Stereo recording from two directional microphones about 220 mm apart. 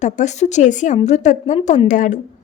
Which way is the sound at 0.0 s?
30° left (ahead or behind).